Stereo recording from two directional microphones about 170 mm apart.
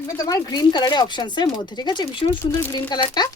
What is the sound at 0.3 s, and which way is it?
A woman's voice, 25° left (ahead or behind).